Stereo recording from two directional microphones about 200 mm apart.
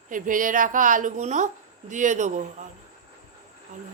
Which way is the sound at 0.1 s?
40° right (ahead or behind).